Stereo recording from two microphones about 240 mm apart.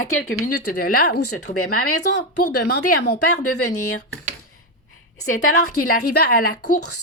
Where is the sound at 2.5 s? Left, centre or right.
Left.